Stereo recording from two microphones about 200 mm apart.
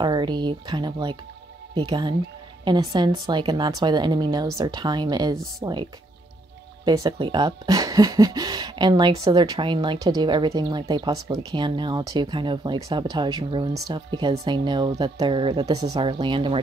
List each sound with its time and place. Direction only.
0.0 s speech: 20° right (ahead or behind)